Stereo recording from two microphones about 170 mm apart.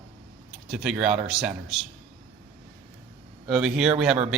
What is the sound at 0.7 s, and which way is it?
Speech, 5° right (ahead or behind).